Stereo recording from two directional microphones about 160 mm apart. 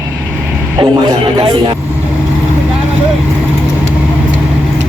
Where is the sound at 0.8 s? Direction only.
30° right (ahead or behind).